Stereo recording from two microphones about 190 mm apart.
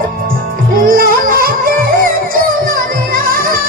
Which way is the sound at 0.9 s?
50° right (ahead or behind).